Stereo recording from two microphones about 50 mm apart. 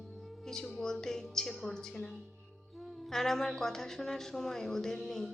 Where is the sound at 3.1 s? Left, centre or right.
Centre.